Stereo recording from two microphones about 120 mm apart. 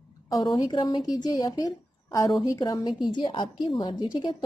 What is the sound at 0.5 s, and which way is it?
Speech, 45° left (ahead or behind).